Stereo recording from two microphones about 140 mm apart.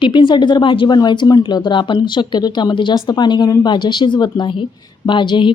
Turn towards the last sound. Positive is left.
turn(degrees=35)  # may be behind; listen again after turning